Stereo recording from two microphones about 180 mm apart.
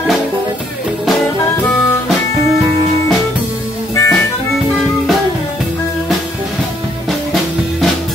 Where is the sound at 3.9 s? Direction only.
15° left (ahead or behind).